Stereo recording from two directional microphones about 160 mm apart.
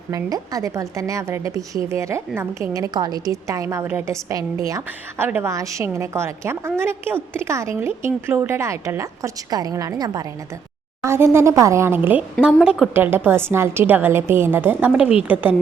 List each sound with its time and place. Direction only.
0.1 s a woman's voice: 20° right (ahead or behind)